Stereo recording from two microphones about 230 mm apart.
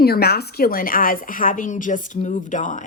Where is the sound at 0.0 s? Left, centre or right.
Left.